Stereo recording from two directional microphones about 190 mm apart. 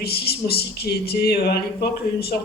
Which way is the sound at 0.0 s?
55° left (ahead or behind).